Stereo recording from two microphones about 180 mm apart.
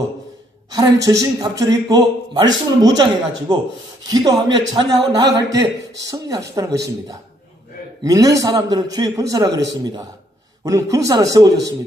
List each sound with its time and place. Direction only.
0.7 s a man's voice: 20° right (ahead or behind)
8.0 s a man's voice: 20° right (ahead or behind)